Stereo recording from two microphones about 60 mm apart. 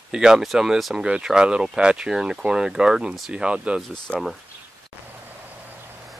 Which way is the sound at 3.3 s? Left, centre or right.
Centre.